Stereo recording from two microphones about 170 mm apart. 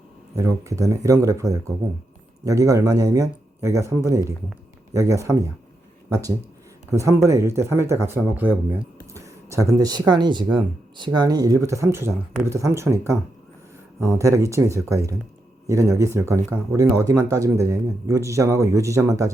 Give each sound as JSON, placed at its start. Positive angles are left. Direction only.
{"t": 0.3, "sound": "speech", "side_deg": -20}
{"t": 6.9, "sound": "speech", "side_deg": -15}
{"t": 14.2, "sound": "speech", "side_deg": -20}